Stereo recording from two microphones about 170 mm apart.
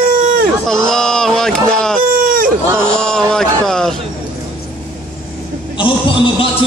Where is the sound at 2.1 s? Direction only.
55° right (ahead or behind).